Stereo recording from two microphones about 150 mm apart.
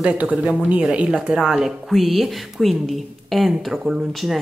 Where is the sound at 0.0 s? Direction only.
10° right (ahead or behind).